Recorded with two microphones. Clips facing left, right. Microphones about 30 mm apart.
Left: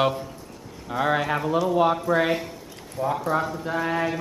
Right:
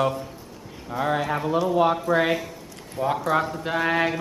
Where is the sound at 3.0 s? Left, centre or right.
Right.